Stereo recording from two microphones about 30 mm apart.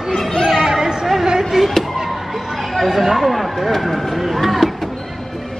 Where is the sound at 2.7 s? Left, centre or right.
Centre.